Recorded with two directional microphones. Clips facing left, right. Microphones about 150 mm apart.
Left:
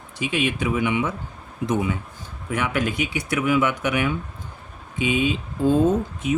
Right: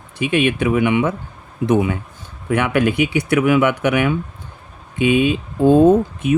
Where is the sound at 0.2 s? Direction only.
60° right (ahead or behind).